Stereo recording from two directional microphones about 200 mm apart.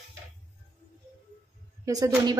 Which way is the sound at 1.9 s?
20° right (ahead or behind).